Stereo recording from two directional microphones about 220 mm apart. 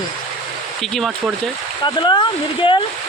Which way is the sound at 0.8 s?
Centre (ahead or behind).